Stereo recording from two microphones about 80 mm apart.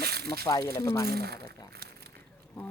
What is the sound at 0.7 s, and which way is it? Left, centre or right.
Speech, left.